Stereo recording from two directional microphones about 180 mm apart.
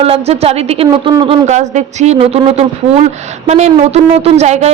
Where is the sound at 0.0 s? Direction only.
35° right (ahead or behind).